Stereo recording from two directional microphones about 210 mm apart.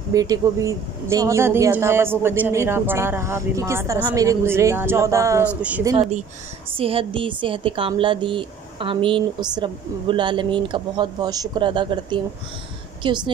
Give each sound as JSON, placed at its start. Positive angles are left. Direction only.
{"t": 0.1, "sound": "speech", "side_deg": -15}
{"t": 5.9, "sound": "a woman's voice", "side_deg": -30}